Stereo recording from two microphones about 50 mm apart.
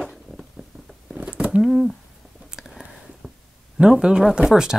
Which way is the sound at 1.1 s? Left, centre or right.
Right.